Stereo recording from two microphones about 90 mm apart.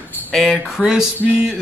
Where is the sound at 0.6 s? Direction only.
5° right (ahead or behind).